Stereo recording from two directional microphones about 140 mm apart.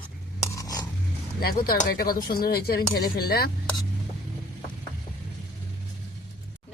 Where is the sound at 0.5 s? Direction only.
25° left (ahead or behind).